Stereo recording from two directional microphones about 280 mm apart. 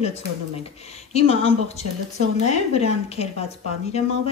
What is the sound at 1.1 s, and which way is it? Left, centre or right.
Speech, left.